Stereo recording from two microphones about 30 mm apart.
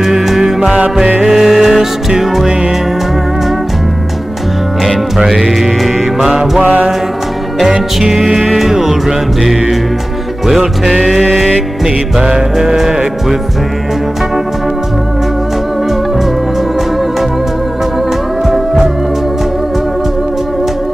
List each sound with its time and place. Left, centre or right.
0.0 s music: centre
4.8 s music: centre
5.9 s music: centre
8.0 s music: centre
10.4 s music: centre
11.8 s music: centre